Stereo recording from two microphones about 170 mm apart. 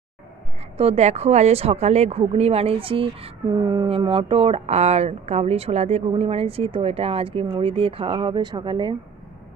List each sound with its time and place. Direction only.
0.7 s speech: 40° right (ahead or behind)